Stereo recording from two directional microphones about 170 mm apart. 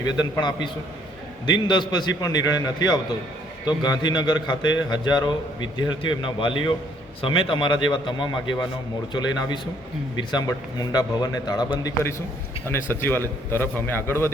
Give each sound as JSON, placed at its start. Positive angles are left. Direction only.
{"t": 0.0, "sound": "a man's voice", "side_deg": 25}
{"t": 10.2, "sound": "a man's voice", "side_deg": 25}